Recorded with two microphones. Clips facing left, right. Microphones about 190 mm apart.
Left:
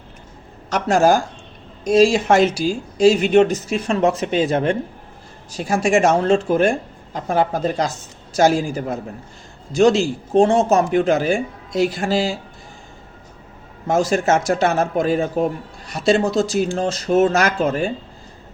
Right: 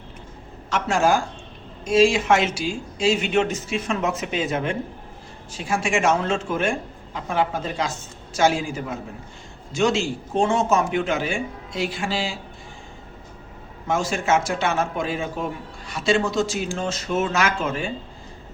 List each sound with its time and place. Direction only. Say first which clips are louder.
0.7 s a woman's voice: left 5 dB; 40° left (ahead or behind)
13.8 s a woman's voice: left 6 dB; 40° left (ahead or behind)